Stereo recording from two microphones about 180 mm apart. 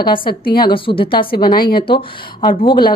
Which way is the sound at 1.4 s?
55° left (ahead or behind).